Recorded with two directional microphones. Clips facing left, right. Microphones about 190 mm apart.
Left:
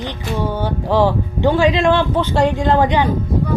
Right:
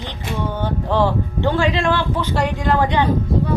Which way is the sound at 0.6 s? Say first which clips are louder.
Left 2 dB; 10° left (ahead or behind).